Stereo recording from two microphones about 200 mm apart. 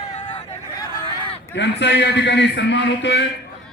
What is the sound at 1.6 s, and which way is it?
A man's voice, 60° left (ahead or behind).